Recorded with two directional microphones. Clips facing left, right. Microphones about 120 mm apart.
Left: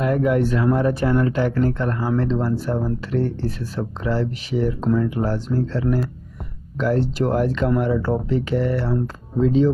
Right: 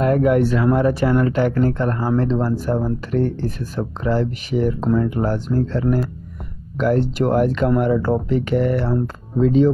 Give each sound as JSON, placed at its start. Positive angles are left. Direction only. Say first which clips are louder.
{"t": 0.0, "sound": "speech", "louder": "right 3 dB", "side_deg": -50}
{"t": 1.5, "sound": "speech", "louder": "right 2 dB", "side_deg": -45}